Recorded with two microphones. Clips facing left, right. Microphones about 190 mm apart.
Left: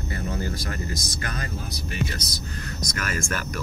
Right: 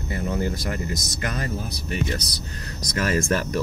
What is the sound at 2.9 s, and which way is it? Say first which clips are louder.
Speech: right 8 dB; 30° right (ahead or behind).